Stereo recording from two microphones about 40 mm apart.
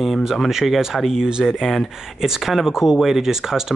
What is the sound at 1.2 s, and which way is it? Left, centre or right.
Speech, centre.